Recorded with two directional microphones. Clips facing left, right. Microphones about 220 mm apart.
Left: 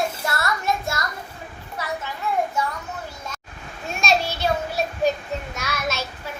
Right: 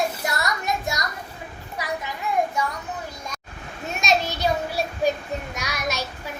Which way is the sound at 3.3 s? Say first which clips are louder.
Right 1 dB; 15° right (ahead or behind).